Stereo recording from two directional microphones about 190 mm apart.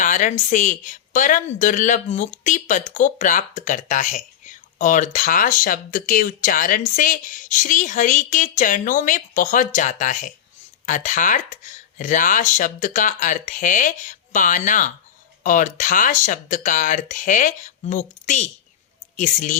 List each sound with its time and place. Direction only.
0.0 s speech: 40° left (ahead or behind)